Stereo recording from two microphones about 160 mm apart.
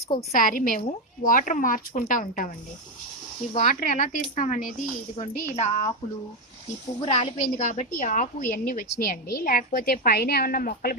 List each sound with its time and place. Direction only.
0.3 s a woman's voice: 60° left (ahead or behind)
3.6 s speech: 55° left (ahead or behind)
7.0 s a woman's voice: 45° left (ahead or behind); by 10.9 s 65° left (ahead or behind)